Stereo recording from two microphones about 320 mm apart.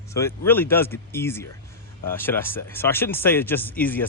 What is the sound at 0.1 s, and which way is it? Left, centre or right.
Speech, centre.